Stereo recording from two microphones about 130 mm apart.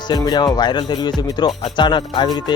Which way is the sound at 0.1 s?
30° left (ahead or behind).